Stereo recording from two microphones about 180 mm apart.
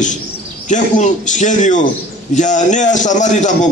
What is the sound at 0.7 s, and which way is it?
A man's voice, 45° left (ahead or behind).